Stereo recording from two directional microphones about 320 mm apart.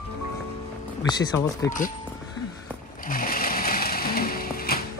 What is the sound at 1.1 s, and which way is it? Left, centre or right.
Speech, centre.